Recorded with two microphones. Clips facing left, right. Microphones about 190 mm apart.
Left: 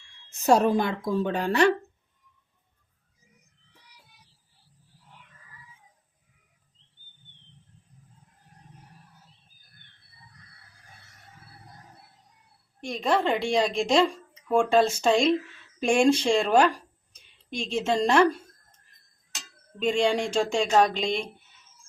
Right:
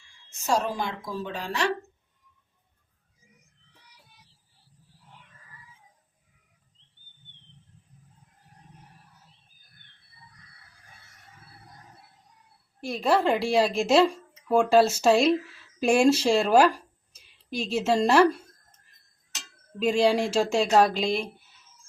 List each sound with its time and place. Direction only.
0.4 s a woman's voice: 60° left (ahead or behind)
12.8 s a woman's voice: 5° right (ahead or behind)
19.8 s a woman's voice: 5° right (ahead or behind)